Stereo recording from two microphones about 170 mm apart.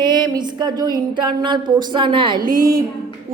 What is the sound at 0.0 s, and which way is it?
Speech, 25° right (ahead or behind).